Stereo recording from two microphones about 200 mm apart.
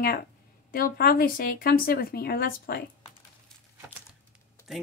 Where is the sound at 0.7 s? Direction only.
45° left (ahead or behind).